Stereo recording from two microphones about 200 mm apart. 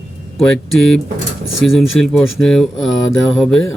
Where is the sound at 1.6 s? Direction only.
5° left (ahead or behind).